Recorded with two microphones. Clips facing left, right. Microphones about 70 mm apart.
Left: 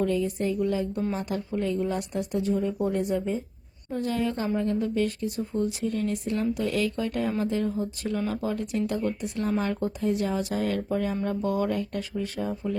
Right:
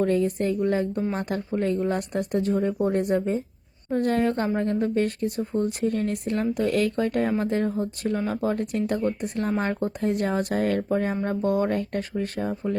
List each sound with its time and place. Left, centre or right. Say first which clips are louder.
0.0 s a woman's voice: right 3 dB; right